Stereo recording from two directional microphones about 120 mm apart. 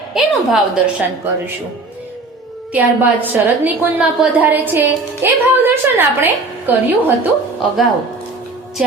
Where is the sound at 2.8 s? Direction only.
15° right (ahead or behind).